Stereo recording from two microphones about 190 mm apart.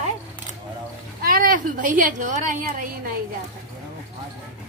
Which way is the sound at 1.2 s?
50° right (ahead or behind).